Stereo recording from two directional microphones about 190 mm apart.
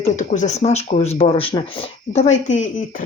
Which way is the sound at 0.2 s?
40° left (ahead or behind).